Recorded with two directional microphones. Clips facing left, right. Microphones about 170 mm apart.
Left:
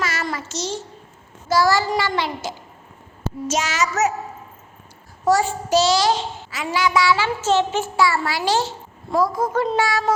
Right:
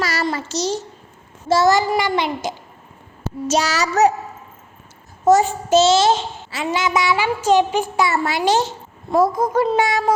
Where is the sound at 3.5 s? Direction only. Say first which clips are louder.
Right 4 dB; 35° right (ahead or behind).